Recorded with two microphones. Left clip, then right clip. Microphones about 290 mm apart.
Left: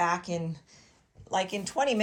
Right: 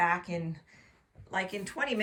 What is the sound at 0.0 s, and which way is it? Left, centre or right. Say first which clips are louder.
Speech: left 1 dB; centre.